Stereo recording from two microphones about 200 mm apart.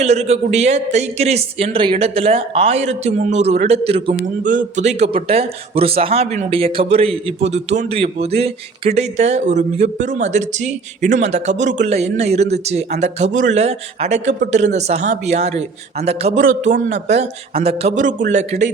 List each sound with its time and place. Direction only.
0.0 s a man's voice: 35° right (ahead or behind)
16.4 s a man's voice: 75° right (ahead or behind)
16.7 s a man's voice: 40° right (ahead or behind)